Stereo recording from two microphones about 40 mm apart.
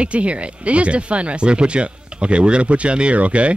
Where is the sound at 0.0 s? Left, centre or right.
Right.